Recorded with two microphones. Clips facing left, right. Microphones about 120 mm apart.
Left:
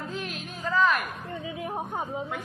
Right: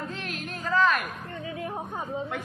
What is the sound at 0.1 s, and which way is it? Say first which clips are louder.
Music: even; centre (ahead or behind).